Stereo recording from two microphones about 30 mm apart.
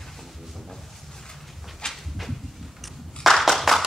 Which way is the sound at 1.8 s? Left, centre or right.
Left.